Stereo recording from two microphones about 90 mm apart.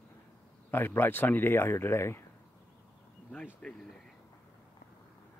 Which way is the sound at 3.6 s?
5° left (ahead or behind).